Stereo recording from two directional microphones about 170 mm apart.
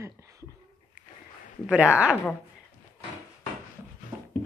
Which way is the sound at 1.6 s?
5° right (ahead or behind).